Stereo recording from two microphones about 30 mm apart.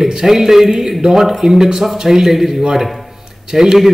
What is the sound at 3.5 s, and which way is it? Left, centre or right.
Speech, right.